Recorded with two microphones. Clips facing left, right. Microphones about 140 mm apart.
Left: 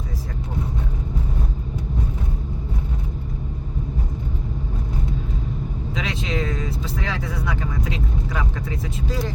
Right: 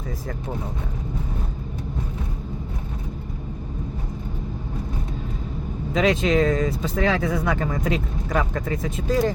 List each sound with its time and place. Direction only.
5.9 s speech: 50° right (ahead or behind)